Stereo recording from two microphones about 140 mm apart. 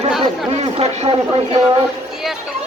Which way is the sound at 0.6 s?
50° right (ahead or behind).